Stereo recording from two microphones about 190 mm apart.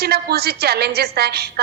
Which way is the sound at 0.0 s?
55° right (ahead or behind).